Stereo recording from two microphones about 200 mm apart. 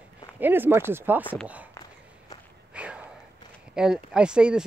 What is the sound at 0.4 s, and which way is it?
Speech, 10° right (ahead or behind).